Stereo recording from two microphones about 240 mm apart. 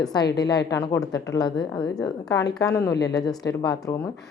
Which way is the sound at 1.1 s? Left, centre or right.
Centre.